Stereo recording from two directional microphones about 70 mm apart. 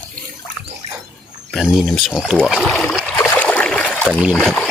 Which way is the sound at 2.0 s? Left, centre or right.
Centre.